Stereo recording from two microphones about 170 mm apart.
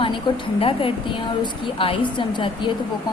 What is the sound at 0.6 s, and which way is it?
Speech, 35° left (ahead or behind).